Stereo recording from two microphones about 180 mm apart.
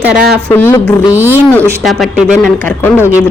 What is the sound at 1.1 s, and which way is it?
Speech, 10° right (ahead or behind).